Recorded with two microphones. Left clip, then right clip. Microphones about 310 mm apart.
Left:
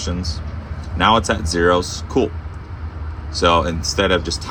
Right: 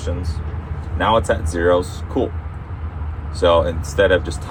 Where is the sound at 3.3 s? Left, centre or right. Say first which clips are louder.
Right 1 dB; centre.